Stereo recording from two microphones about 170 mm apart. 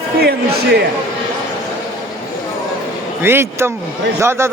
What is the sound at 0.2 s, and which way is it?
Speech, 70° right (ahead or behind).